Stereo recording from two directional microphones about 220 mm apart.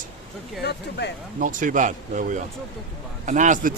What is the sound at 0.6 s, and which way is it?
Speech, 50° left (ahead or behind).